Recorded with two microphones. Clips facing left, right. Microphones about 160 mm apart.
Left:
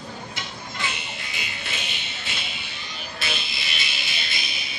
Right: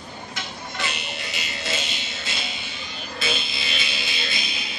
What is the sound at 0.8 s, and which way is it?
Music, 75° right (ahead or behind).